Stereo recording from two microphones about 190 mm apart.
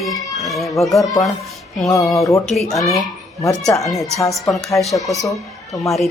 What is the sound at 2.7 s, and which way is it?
Speech, centre (ahead or behind).